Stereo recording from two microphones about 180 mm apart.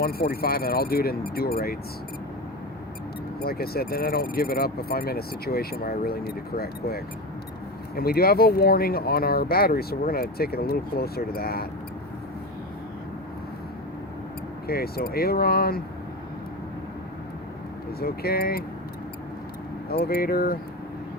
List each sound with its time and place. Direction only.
0.0 s speech: 60° left (ahead or behind)
3.4 s speech: 60° left (ahead or behind)
14.7 s speech: 60° left (ahead or behind)
18.0 s speech: 60° left (ahead or behind)
19.9 s speech: 60° left (ahead or behind)